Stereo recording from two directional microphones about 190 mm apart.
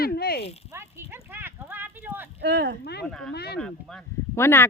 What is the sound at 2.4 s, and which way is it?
Speech, 60° right (ahead or behind).